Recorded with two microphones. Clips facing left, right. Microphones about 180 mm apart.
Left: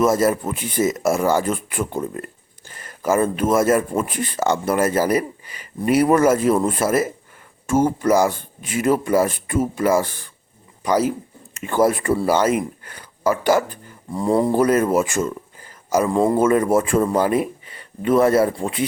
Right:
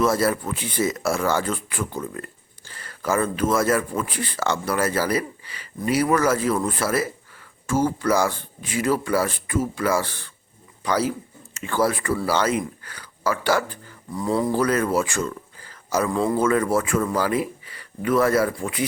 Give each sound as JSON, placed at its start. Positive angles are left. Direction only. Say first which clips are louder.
{"t": 0.0, "sound": "speech", "louder": "left 3 dB", "side_deg": 20}